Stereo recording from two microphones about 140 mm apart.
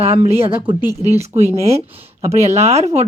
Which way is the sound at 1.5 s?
20° right (ahead or behind).